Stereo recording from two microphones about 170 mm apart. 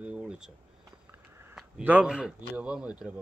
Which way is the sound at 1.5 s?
10° right (ahead or behind).